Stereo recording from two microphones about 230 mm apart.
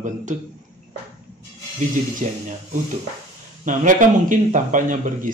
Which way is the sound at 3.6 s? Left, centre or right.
Right.